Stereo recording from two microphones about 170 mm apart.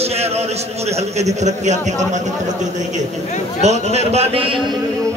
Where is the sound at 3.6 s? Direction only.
40° right (ahead or behind).